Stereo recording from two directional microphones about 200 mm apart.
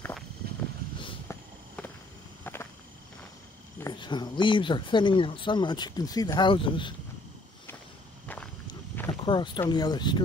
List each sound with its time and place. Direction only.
2.4 s a sound: 10° left (ahead or behind)
3.8 s speech: 20° left (ahead or behind)
9.2 s speech: 25° left (ahead or behind)